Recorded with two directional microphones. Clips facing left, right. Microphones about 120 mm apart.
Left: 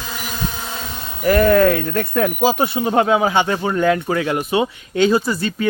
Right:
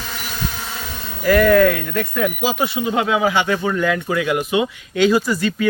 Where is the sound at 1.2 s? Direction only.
30° left (ahead or behind).